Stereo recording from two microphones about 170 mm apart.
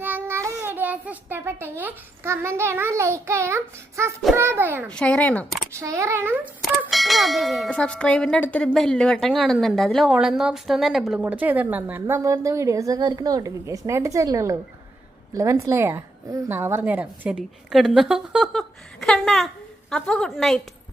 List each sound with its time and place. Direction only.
0.0 s a child's voice: 10° right (ahead or behind)
4.9 s speech: 5° left (ahead or behind)
5.7 s a child's voice: 15° right (ahead or behind)
6.9 s a woman's voice: centre (ahead or behind)